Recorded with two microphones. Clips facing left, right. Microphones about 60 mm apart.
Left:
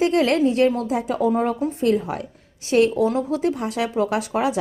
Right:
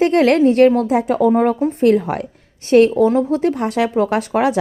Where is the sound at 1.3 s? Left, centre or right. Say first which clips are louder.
Right 6 dB; right.